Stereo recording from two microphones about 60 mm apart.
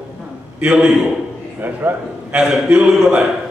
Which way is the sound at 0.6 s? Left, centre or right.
Centre.